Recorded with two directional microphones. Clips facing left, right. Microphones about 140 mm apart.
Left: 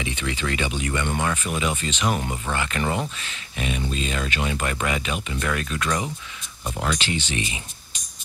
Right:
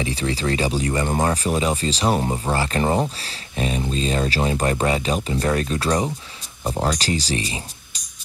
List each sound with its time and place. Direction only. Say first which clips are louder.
0.0 s speech: right 5 dB; 35° right (ahead or behind)